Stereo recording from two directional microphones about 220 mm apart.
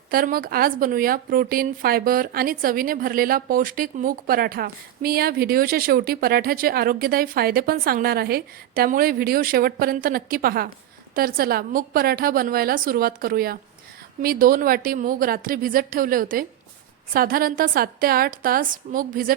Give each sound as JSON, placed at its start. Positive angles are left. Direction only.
{"t": 0.1, "sound": "a woman's voice", "side_deg": -40}